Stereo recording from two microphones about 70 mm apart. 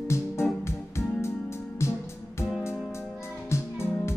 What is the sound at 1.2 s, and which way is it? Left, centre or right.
Music, left.